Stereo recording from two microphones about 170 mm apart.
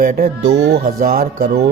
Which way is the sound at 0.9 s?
60° right (ahead or behind).